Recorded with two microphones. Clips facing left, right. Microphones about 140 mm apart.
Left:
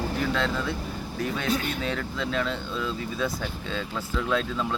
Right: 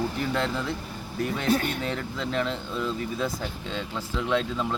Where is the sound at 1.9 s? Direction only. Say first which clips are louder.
Even; 20° right (ahead or behind).